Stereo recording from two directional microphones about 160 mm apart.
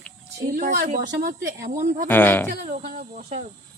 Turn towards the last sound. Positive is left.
turn(degrees=-60)  # may be behind; listen again after turning